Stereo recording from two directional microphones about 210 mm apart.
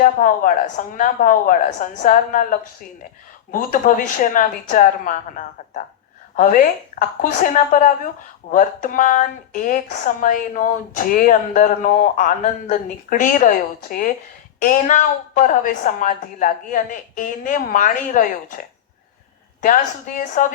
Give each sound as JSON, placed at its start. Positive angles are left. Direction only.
{"t": 0.0, "sound": "a woman's voice", "side_deg": 40}
{"t": 6.3, "sound": "a woman's voice", "side_deg": 40}
{"t": 19.6, "sound": "a woman's voice", "side_deg": 40}